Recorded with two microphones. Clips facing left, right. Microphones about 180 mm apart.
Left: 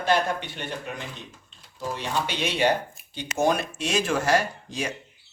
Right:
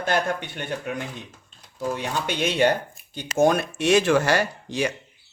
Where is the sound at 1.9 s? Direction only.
55° right (ahead or behind); by 4.9 s 70° right (ahead or behind).